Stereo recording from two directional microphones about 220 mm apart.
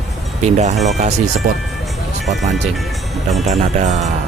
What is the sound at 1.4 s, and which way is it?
Speech, 40° right (ahead or behind).